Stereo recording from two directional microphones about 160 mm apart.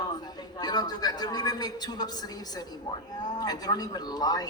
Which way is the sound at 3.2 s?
25° left (ahead or behind).